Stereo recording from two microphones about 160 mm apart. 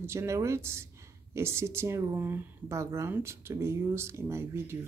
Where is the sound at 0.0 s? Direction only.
15° right (ahead or behind).